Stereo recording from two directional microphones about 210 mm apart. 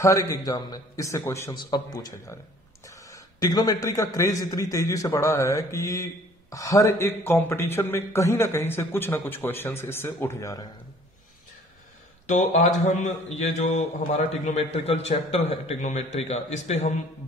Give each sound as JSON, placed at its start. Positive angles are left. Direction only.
{"t": 0.3, "sound": "a man's voice", "side_deg": 15}
{"t": 12.3, "sound": "a man's voice", "side_deg": 35}